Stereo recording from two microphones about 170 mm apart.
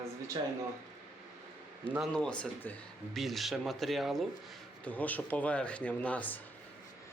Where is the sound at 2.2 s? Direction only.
5° left (ahead or behind).